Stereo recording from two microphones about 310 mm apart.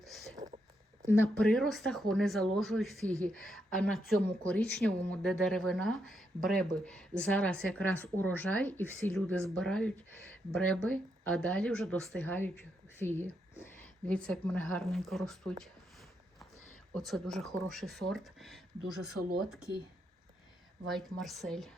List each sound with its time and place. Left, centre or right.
0.0 s a sound: centre
0.3 s a sound: right
1.0 s a woman's voice: centre
13.6 s a woman's voice: centre
16.9 s a woman's voice: centre
20.8 s a woman's voice: centre